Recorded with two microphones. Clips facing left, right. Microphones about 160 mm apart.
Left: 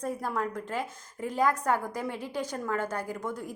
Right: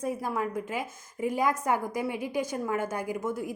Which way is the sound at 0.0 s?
10° right (ahead or behind).